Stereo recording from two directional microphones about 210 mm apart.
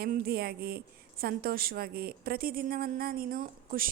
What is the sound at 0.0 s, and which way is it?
A woman's voice, 45° right (ahead or behind).